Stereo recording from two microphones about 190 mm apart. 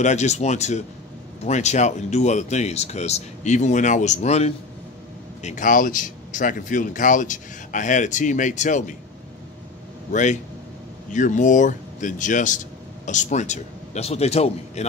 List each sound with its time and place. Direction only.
0.0 s a man's voice: 35° left (ahead or behind)
11.1 s a man's voice: 40° left (ahead or behind)